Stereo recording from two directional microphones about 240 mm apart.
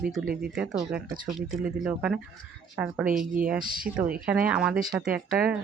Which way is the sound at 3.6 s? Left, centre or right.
Right.